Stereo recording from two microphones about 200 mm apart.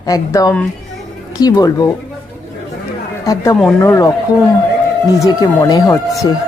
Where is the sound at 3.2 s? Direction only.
15° left (ahead or behind).